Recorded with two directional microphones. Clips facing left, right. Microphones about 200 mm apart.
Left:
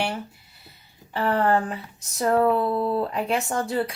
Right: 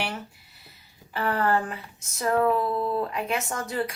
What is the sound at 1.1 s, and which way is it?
Speech, 30° left (ahead or behind).